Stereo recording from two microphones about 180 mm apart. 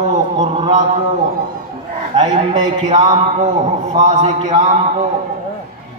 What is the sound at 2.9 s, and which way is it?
Speech, 30° right (ahead or behind).